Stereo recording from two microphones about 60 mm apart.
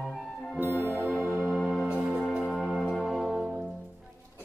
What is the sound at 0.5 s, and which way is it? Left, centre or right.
Music, right.